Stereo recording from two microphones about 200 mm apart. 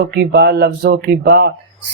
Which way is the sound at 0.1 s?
55° right (ahead or behind).